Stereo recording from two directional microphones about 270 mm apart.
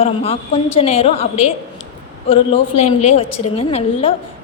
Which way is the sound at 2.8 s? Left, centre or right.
Left.